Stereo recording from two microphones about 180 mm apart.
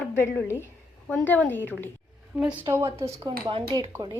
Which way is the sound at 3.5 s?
30° right (ahead or behind).